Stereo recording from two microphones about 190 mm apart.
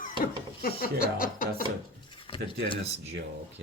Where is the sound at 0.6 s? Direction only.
50° left (ahead or behind).